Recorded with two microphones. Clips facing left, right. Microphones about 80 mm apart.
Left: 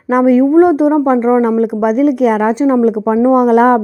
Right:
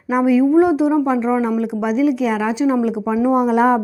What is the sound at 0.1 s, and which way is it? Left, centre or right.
A woman's voice, left.